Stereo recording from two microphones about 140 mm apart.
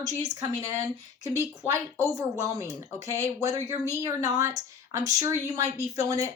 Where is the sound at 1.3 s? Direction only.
25° right (ahead or behind).